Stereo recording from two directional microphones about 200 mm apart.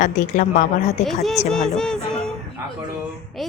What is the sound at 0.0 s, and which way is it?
Speech, 40° left (ahead or behind).